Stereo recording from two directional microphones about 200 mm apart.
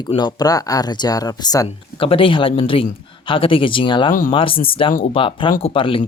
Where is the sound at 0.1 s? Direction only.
20° left (ahead or behind).